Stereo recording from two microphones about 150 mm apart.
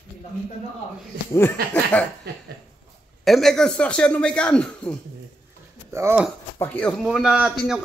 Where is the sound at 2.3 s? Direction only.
90° right.